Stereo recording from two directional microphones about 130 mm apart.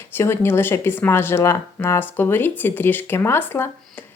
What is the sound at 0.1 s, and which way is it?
Speech, 15° left (ahead or behind).